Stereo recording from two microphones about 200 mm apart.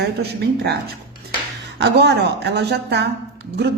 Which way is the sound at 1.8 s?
60° right (ahead or behind).